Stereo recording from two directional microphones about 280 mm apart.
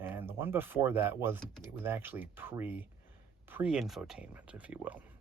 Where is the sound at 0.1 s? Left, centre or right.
Centre.